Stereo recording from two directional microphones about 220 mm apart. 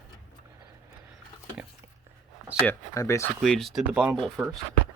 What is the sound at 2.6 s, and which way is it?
Speech, 15° left (ahead or behind).